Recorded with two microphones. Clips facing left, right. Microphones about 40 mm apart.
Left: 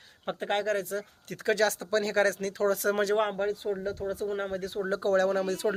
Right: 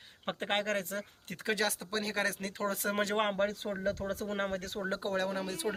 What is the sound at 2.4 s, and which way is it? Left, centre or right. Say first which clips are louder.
Speech: left 7 dB; right.